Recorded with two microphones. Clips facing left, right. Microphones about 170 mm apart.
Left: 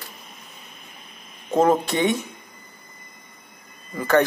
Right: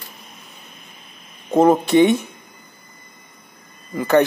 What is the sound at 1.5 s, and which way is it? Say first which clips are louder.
Speech: right 5 dB; 15° right (ahead or behind).